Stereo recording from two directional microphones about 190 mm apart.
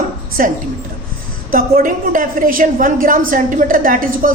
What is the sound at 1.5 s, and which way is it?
A woman's voice, 45° right (ahead or behind).